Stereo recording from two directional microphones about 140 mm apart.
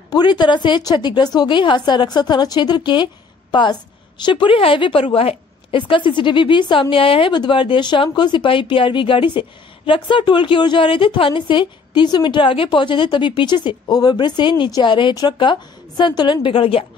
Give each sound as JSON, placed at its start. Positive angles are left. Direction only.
{"t": 0.1, "sound": "a woman's voice", "side_deg": 30}
{"t": 4.2, "sound": "a woman's voice", "side_deg": 35}